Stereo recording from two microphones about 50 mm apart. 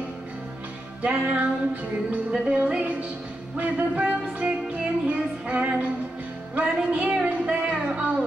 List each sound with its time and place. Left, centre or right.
1.0 s music: right